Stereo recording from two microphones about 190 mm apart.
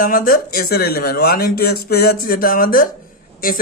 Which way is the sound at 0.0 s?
45° left (ahead or behind).